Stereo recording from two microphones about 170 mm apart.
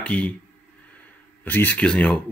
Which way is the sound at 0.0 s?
10° left (ahead or behind).